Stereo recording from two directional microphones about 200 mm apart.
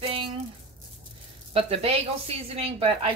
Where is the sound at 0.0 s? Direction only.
25° right (ahead or behind).